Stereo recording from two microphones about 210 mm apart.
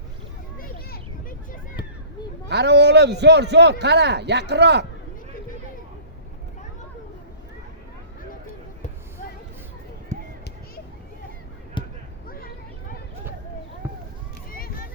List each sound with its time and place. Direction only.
2.5 s a man's voice: 55° right (ahead or behind)
11.8 s basketball bounce: 25° left (ahead or behind)